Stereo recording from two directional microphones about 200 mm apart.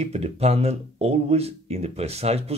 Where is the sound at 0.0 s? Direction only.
30° right (ahead or behind).